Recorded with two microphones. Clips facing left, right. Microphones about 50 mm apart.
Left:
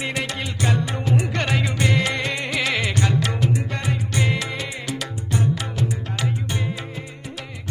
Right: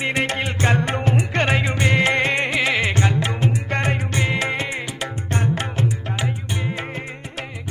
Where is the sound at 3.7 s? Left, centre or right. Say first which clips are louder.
Right 4 dB; right.